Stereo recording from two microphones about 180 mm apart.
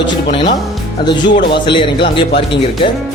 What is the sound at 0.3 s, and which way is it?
Speech, 30° left (ahead or behind).